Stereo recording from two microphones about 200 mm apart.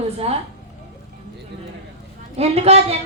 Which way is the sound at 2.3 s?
30° right (ahead or behind).